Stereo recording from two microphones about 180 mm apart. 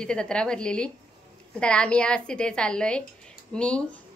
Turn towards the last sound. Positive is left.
turn(degrees=5)  # may be behind; listen again after turning